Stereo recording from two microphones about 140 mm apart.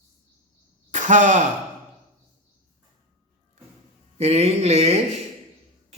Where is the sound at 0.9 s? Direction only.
60° right (ahead or behind).